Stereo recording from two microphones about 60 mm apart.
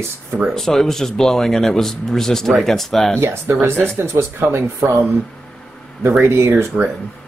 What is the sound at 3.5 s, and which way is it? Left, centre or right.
Speech, right.